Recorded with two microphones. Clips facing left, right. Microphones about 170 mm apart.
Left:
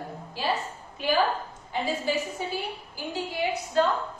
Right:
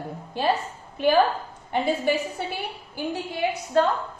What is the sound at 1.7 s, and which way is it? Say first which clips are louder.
Speech: right 5 dB; 60° right (ahead or behind).